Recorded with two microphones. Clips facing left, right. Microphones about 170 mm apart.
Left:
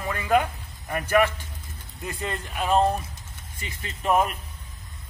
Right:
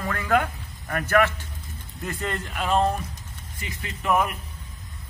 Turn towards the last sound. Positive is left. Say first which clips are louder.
# left 1 dB
turn(degrees=30)  # may be behind; listen again after turning